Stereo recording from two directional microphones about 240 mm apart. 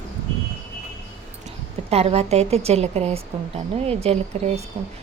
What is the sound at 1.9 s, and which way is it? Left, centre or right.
A woman's voice, right.